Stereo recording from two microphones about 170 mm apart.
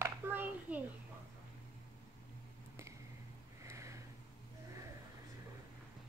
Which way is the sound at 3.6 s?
15° right (ahead or behind).